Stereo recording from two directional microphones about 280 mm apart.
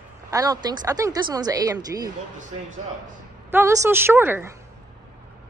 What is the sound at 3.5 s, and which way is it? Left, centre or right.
A woman's voice, centre.